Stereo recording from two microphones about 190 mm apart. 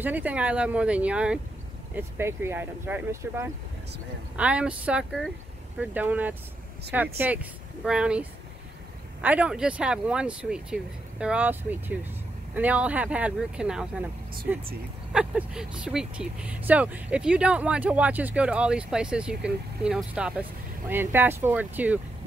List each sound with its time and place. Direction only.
0.0 s speech: 10° right (ahead or behind)
15.1 s speech: 5° right (ahead or behind)